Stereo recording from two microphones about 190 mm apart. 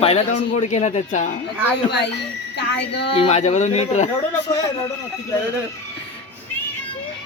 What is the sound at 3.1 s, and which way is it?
Speech, 35° left (ahead or behind).